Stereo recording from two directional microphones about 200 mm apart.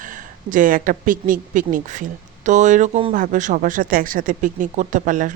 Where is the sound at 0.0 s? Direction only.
40° right (ahead or behind).